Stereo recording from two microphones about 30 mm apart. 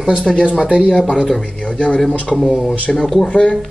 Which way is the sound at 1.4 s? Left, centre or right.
Left.